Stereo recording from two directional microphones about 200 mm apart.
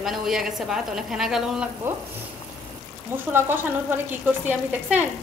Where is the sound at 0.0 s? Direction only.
Centre (ahead or behind).